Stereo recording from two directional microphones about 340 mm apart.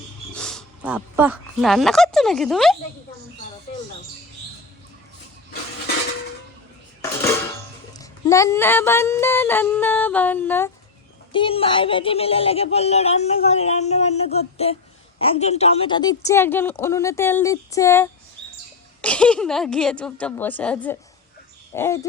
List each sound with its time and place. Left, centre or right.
0.3 s speech: centre
7.9 s a woman's voice: centre